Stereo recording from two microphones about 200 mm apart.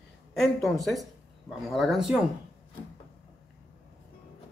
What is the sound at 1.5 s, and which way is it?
Speech, centre (ahead or behind).